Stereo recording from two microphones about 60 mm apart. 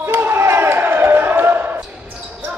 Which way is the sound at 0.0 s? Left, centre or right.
Right.